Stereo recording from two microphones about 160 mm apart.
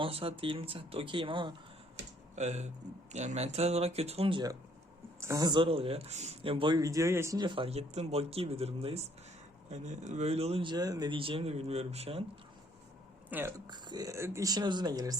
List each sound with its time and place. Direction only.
0.0 s speech: 35° right (ahead or behind)
2.3 s speech: 45° right (ahead or behind)
13.3 s speech: 10° right (ahead or behind)
13.7 s speech: 25° right (ahead or behind)